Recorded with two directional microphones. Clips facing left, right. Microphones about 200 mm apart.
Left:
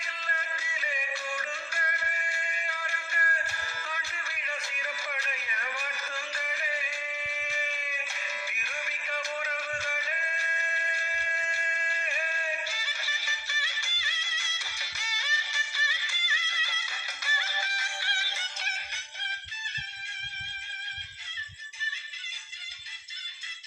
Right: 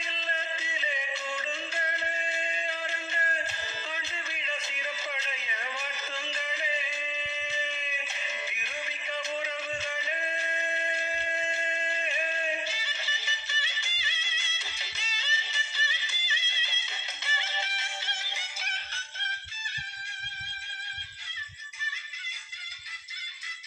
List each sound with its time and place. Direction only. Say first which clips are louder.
0.0 s music: right 3 dB; 20° right (ahead or behind)